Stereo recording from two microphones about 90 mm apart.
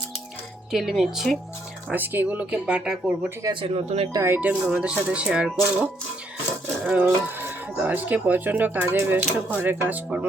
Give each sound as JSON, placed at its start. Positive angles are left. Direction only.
{"t": 0.7, "sound": "speech", "side_deg": 0}
{"t": 1.9, "sound": "speech", "side_deg": -20}
{"t": 3.5, "sound": "speech", "side_deg": -85}
{"t": 4.1, "sound": "speech", "side_deg": -35}
{"t": 4.4, "sound": "speech", "side_deg": -15}
{"t": 5.5, "sound": "speech", "side_deg": 0}
{"t": 7.0, "sound": "speech", "side_deg": -25}